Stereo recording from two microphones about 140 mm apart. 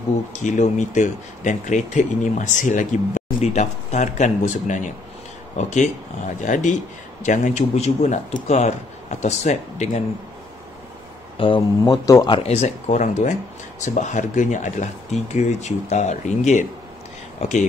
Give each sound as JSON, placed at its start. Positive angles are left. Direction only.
{"t": 0.3, "sound": "speech", "side_deg": 60}
{"t": 11.3, "sound": "speech", "side_deg": 35}
{"t": 12.4, "sound": "speech", "side_deg": 50}